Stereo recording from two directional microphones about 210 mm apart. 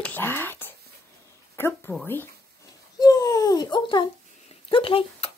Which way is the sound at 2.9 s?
20° left (ahead or behind).